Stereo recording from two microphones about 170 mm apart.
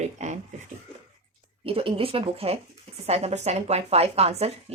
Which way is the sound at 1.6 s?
35° right (ahead or behind).